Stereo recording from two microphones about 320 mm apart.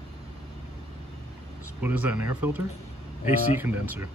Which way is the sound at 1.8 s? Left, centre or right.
Centre.